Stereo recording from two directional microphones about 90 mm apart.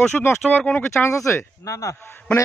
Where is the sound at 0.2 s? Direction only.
25° left (ahead or behind).